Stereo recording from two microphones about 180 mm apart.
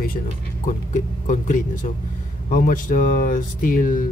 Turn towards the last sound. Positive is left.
turn(degrees=50)  # may be behind; listen again after turning